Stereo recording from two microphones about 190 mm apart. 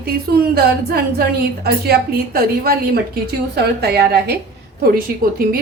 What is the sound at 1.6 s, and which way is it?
A woman's voice, 55° right (ahead or behind).